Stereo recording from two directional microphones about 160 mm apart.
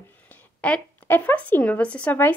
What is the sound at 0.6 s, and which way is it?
Speech, 10° left (ahead or behind).